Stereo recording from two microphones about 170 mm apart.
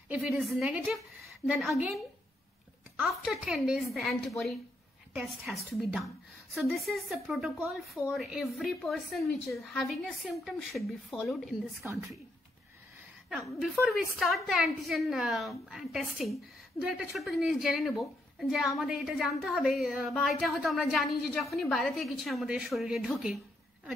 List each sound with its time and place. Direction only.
0.6 s a woman's voice: 5° right (ahead or behind)
3.0 s a woman's voice: 5° right (ahead or behind)
5.1 s a woman's voice: 5° right (ahead or behind)
11.8 s a woman's voice: 15° right (ahead or behind)
13.3 s a woman's voice: centre (ahead or behind)